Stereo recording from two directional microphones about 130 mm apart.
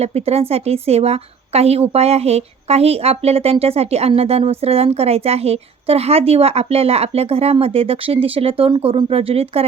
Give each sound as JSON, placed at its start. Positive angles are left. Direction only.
{"t": 0.0, "sound": "a woman's voice", "side_deg": -55}